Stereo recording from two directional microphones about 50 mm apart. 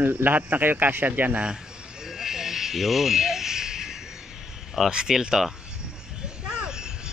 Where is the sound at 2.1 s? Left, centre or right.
Centre.